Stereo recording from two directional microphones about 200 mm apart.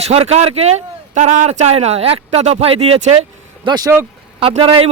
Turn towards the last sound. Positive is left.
turn(degrees=-25)  # may be behind; listen again after turning